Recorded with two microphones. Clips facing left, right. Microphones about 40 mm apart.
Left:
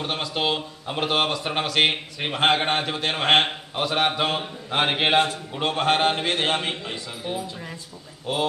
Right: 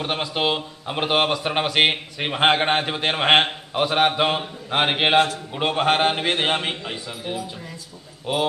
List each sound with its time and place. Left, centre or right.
0.0 s speech: right